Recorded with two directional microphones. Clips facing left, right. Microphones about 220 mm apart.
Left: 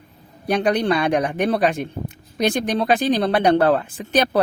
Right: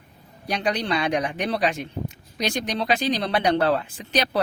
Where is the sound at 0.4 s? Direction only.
55° left (ahead or behind).